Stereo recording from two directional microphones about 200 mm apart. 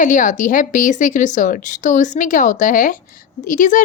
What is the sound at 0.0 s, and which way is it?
A woman's voice, 40° left (ahead or behind).